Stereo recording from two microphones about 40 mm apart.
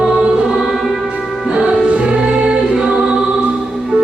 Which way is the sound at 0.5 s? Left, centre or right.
Centre.